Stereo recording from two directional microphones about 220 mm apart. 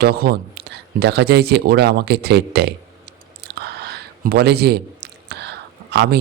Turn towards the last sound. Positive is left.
turn(degrees=-50)  # may be behind; listen again after turning